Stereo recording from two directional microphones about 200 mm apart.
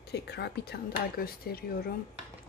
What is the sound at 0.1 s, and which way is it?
Speech, 55° left (ahead or behind).